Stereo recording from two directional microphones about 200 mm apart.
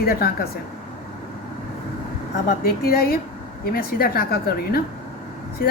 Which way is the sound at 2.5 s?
50° left (ahead or behind).